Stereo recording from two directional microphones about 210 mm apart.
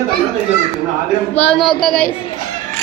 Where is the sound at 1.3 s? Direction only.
5° left (ahead or behind).